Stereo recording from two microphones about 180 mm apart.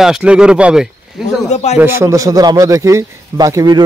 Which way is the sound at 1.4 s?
40° left (ahead or behind).